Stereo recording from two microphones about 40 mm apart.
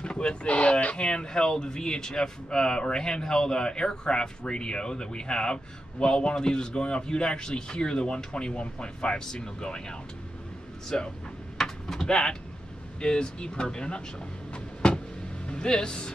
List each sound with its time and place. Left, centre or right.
0.0 s speech: left
11.5 s vehicle: centre
13.0 s speech: left
14.5 s a sound: left
15.4 s speech: left